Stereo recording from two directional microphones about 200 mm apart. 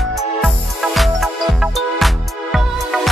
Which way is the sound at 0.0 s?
Centre (ahead or behind).